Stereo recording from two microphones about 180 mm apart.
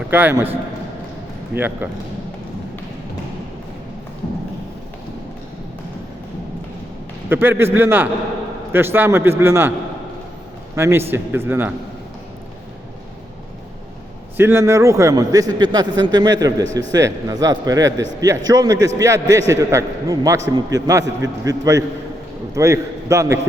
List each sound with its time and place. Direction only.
0.1 s a man's voice: 10° right (ahead or behind)
7.3 s a man's voice: 10° right (ahead or behind)
10.8 s a man's voice: 15° right (ahead or behind)
14.3 s a man's voice: 15° right (ahead or behind)